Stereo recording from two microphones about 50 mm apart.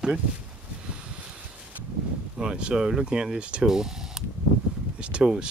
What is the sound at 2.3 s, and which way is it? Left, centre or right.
Speech, centre.